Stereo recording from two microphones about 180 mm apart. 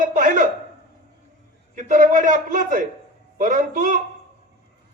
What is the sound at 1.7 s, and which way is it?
A man's voice, 45° right (ahead or behind).